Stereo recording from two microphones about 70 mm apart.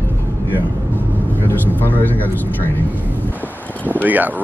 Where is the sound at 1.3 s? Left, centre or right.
Left.